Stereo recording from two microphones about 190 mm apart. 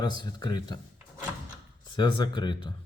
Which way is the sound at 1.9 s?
25° left (ahead or behind).